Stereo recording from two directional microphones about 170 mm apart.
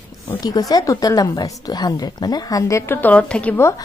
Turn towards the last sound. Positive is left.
turn(degrees=15)  # may be behind; listen again after turning